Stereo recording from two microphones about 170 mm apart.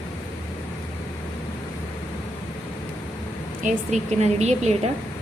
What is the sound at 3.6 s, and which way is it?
A woman's voice, 40° right (ahead or behind).